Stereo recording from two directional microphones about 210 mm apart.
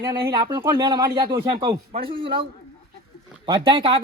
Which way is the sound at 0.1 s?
20° right (ahead or behind).